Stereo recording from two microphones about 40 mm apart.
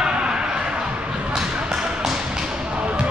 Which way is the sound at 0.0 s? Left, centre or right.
Right.